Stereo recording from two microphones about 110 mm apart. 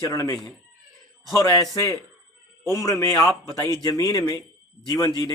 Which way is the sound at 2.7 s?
25° left (ahead or behind).